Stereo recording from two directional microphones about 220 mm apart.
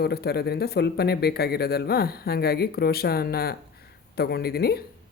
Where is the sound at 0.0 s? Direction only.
45° left (ahead or behind).